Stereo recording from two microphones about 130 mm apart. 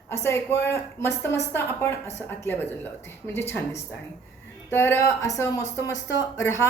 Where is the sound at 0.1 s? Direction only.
20° left (ahead or behind).